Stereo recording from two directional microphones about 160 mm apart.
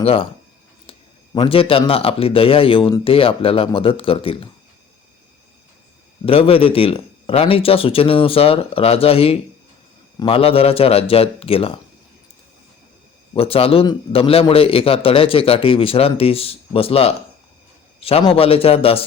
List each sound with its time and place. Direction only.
0.0 s a man's voice: 35° left (ahead or behind)
1.3 s a man's voice: 30° left (ahead or behind)
6.2 s a man's voice: 35° left (ahead or behind)
13.3 s a man's voice: 35° left (ahead or behind)